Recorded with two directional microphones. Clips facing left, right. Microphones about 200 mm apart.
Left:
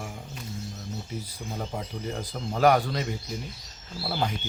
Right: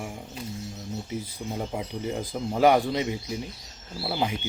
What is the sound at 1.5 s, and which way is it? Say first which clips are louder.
Speech: right 2 dB; 10° right (ahead or behind).